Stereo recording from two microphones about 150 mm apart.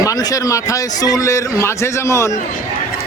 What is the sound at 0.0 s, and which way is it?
A man's voice, 25° left (ahead or behind).